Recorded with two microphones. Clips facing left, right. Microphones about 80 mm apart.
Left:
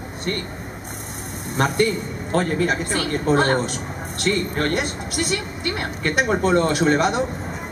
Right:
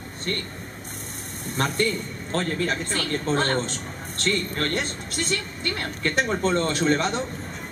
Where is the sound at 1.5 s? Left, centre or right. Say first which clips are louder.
Left 5 dB; centre.